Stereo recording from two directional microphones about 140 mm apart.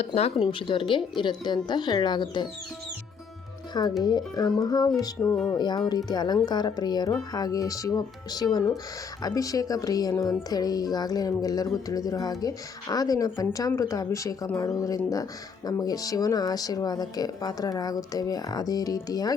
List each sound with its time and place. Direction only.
0.0 s speech: 45° left (ahead or behind); by 2.5 s 30° left (ahead or behind)
4.0 s speech: 30° left (ahead or behind)
5.5 s speech: 30° left (ahead or behind)